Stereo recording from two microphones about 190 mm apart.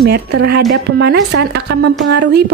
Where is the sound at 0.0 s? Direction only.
55° right (ahead or behind).